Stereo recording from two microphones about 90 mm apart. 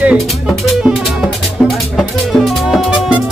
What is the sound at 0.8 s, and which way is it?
Music, centre (ahead or behind).